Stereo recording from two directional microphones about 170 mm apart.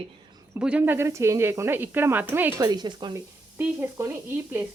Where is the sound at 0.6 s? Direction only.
5° right (ahead or behind).